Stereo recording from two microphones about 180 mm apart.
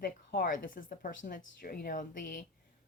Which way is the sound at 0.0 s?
55° left (ahead or behind).